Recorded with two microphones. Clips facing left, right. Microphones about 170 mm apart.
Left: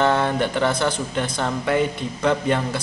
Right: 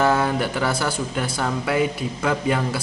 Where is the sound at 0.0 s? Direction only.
5° right (ahead or behind).